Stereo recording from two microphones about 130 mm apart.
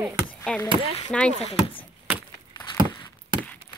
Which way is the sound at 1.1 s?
5° left (ahead or behind).